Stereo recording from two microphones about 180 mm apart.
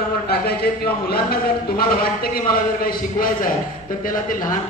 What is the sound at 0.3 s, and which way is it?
Speech, 60° left (ahead or behind).